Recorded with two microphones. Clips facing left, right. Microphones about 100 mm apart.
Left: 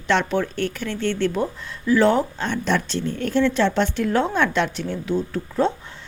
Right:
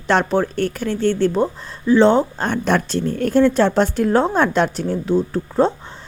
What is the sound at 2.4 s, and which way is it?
Speech, 50° right (ahead or behind).